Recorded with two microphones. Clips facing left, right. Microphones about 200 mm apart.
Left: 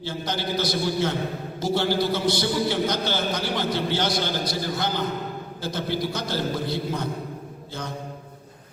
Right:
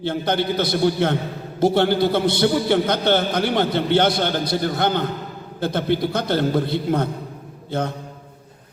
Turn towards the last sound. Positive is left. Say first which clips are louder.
# right 9 dB
turn(degrees=-60)  # may be behind; listen again after turning